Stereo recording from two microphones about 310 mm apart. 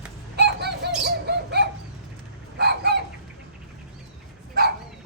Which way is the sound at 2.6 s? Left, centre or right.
Right.